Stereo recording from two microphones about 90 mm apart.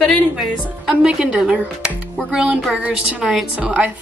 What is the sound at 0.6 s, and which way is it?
A woman's voice, 10° right (ahead or behind).